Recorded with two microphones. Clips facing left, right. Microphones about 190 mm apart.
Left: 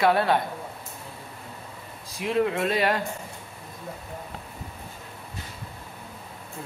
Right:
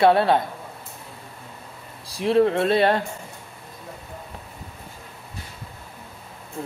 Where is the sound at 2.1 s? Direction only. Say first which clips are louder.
Right 6 dB; 35° right (ahead or behind).